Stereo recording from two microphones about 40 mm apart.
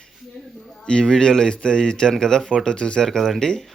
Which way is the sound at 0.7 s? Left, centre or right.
Centre.